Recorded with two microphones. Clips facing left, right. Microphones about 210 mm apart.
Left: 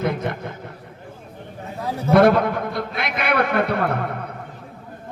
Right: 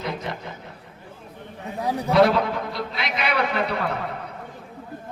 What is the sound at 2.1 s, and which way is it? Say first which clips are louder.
A man's voice: left 4 dB; 55° left (ahead or behind).